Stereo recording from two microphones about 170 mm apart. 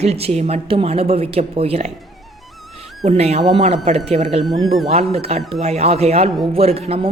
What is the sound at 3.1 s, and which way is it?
A woman's voice, 35° right (ahead or behind).